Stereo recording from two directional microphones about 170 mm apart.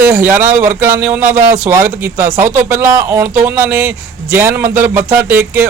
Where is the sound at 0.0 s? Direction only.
15° right (ahead or behind).